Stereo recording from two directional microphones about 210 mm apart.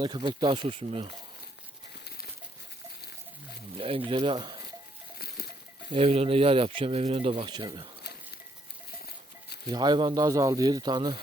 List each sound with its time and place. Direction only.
0.0 s speech: 20° right (ahead or behind)
3.8 s speech: 25° right (ahead or behind)
5.1 s livestock: 50° left (ahead or behind)
5.9 s speech: 30° right (ahead or behind)
9.6 s speech: 20° right (ahead or behind)